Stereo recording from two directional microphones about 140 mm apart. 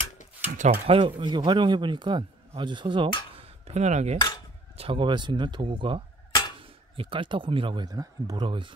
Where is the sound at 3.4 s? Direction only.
45° right (ahead or behind).